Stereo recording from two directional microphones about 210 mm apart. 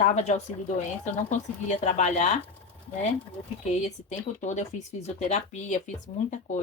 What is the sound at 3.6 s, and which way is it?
Speech, 30° left (ahead or behind).